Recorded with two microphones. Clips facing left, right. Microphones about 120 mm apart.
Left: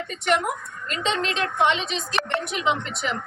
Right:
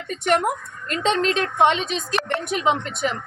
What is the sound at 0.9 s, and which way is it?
A woman's voice, 45° right (ahead or behind).